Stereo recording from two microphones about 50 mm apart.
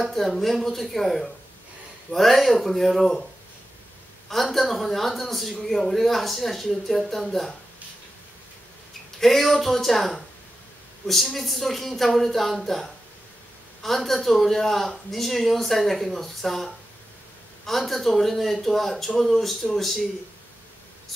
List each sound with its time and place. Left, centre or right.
0.0 s speech: centre
4.3 s speech: centre
9.2 s speech: centre
11.3 s speech: centre